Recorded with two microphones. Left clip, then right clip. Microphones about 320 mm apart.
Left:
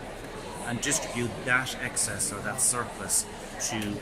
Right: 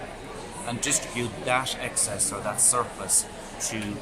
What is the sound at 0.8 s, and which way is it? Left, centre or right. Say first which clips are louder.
Speech: right 2 dB; centre.